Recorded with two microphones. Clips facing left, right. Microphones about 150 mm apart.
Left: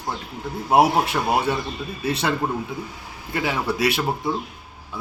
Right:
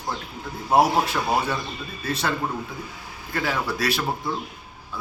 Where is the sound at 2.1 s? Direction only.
25° left (ahead or behind).